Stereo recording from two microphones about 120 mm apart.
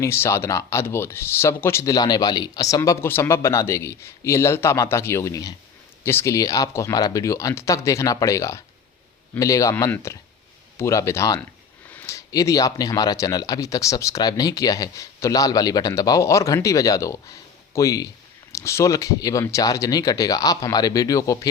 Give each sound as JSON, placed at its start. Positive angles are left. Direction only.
{"t": 0.0, "sound": "speech", "side_deg": 25}